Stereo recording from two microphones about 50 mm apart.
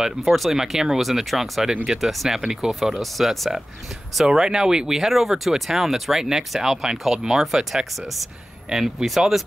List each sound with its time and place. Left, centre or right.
0.2 s speech: centre
4.3 s speech: centre